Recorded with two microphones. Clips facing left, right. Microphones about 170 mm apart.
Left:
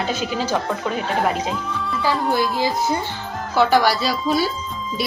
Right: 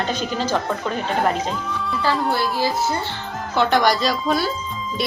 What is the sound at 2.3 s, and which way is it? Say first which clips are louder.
Speech: left 1 dB; 15° left (ahead or behind).